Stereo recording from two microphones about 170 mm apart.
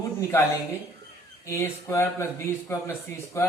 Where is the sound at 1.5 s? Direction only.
15° left (ahead or behind).